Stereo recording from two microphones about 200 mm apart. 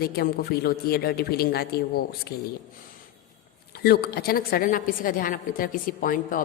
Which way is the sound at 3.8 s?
50° left (ahead or behind).